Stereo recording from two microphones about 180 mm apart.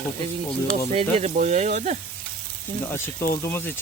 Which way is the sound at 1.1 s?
40° right (ahead or behind).